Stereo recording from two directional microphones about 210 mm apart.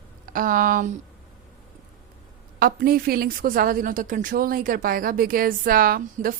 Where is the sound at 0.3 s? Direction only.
40° right (ahead or behind).